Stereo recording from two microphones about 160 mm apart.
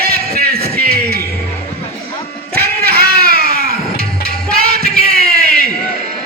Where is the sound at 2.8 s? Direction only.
75° right (ahead or behind).